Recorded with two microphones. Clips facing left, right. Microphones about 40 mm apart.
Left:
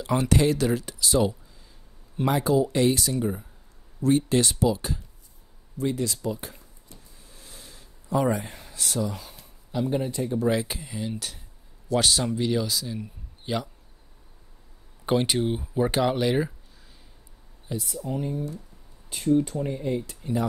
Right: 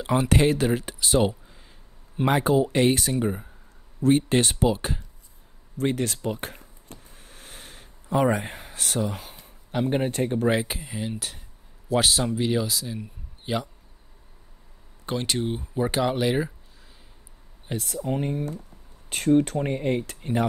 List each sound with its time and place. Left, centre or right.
0.0 s speech: right
5.8 s a sound: right
9.7 s speech: right
10.7 s a man's voice: centre
15.0 s speech: centre
15.3 s speech: centre
17.6 s speech: right